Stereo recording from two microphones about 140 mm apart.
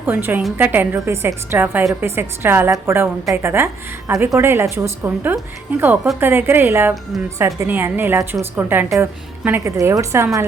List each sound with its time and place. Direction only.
0.0 s a woman's voice: 15° right (ahead or behind)